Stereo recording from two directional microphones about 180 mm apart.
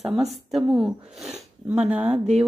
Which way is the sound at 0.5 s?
Centre (ahead or behind).